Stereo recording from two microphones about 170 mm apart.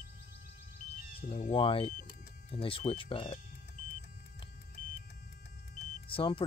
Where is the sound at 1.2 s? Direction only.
50° left (ahead or behind).